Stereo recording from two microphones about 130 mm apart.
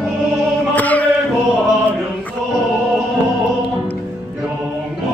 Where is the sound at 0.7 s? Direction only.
10° left (ahead or behind).